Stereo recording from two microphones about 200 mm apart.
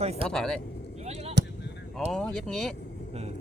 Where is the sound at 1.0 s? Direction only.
35° right (ahead or behind).